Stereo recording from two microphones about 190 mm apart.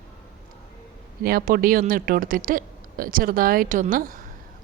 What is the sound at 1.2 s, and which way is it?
Speech, 50° right (ahead or behind).